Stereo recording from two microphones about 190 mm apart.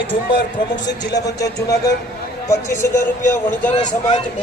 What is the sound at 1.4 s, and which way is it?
A man's voice, 20° left (ahead or behind).